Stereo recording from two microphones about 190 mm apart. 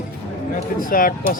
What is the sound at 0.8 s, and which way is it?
Speech, 45° left (ahead or behind).